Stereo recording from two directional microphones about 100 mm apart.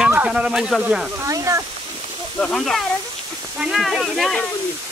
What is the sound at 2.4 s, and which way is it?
Speech, 5° left (ahead or behind).